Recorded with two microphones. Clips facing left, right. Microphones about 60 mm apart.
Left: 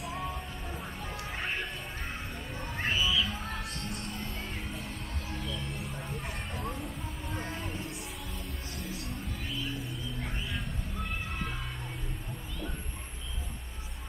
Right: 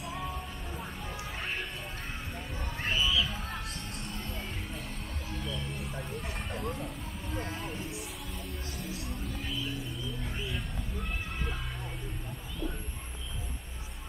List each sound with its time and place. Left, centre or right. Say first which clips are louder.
0.0 s music: left 1 dB; centre
2.3 s a sound: even; centre
2.8 s music: even; centre